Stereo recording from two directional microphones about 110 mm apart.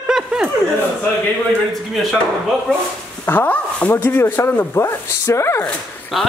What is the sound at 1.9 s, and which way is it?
Speech, centre (ahead or behind).